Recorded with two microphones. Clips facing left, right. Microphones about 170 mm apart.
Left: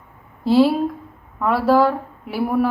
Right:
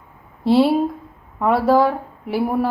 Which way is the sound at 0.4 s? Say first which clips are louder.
Even; 30° right (ahead or behind).